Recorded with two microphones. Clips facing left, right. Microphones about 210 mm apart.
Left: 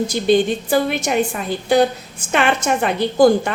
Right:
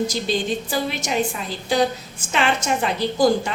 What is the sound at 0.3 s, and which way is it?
A woman's voice, 55° left (ahead or behind).